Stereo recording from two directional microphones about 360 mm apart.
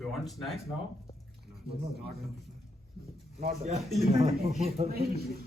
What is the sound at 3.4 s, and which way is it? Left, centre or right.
A man's voice, right.